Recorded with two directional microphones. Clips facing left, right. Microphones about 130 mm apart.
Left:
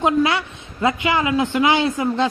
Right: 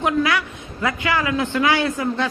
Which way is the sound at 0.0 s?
25° left (ahead or behind).